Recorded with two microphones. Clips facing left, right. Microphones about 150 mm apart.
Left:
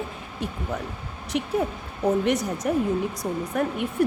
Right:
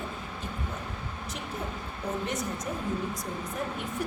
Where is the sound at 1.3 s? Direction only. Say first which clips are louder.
Left 13 dB; 75° left (ahead or behind).